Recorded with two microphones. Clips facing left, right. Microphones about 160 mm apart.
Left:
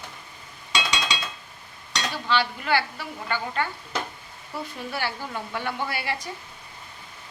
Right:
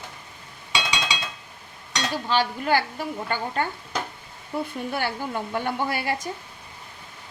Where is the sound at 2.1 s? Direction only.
45° right (ahead or behind).